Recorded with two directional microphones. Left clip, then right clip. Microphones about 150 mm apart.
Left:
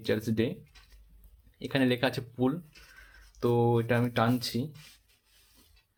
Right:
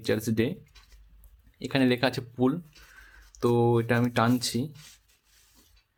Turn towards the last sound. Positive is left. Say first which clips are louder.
# right 3 dB
turn(degrees=-30)  # may be behind; listen again after turning